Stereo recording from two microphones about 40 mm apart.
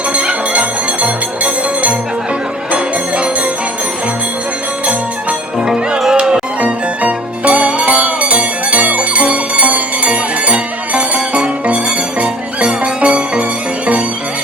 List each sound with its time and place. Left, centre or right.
0.1 s bell: right
5.5 s music: centre
6.6 s music: right